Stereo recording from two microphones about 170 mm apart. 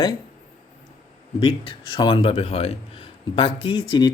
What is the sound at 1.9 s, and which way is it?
Speech, 30° left (ahead or behind).